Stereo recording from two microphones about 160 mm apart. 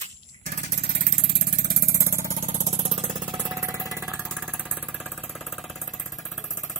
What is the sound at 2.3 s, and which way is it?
Vehicle, 45° right (ahead or behind).